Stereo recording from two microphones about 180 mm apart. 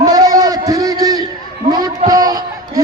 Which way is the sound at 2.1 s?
20° right (ahead or behind).